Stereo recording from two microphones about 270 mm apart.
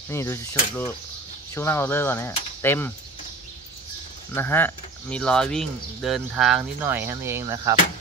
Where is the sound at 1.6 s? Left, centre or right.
Centre.